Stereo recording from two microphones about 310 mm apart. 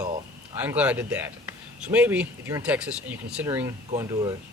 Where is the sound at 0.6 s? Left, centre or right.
Centre.